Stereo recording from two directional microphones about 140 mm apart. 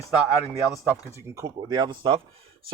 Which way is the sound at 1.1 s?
20° right (ahead or behind).